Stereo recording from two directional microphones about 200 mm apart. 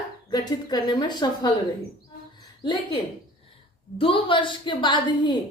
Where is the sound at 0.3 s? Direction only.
20° left (ahead or behind).